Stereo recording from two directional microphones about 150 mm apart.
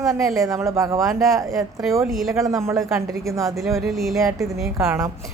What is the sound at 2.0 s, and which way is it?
Speech, centre (ahead or behind).